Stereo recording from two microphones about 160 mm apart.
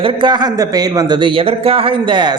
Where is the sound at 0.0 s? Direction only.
30° right (ahead or behind).